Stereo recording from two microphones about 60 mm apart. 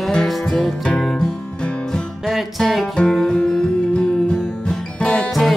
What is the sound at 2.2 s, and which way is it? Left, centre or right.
Music, centre.